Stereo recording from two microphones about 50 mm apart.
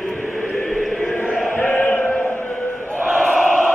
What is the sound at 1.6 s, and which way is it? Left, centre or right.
Choir, left.